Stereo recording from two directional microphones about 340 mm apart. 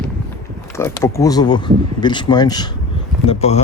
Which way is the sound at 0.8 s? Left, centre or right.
Centre.